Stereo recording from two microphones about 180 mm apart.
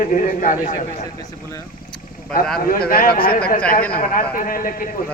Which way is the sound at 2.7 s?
55° left (ahead or behind).